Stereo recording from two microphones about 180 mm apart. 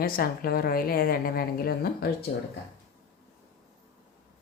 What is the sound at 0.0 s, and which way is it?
A woman's voice, 55° left (ahead or behind).